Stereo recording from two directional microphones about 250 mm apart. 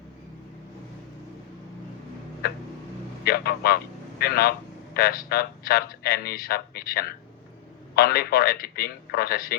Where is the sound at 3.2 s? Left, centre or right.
Left.